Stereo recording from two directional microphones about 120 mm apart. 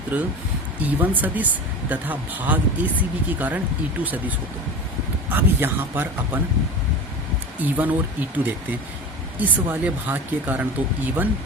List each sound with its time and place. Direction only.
0.1 s speech: 10° right (ahead or behind)
7.6 s speech: 15° right (ahead or behind)
9.4 s speech: 15° right (ahead or behind)